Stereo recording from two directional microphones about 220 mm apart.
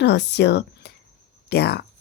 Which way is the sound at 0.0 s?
50° left (ahead or behind).